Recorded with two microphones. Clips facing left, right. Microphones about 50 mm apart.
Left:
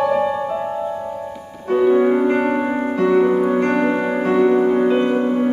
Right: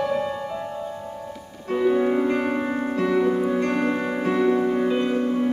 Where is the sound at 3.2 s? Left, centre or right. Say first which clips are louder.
Left 5 dB; left.